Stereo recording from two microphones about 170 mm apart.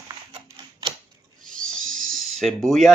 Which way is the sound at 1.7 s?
5° left (ahead or behind).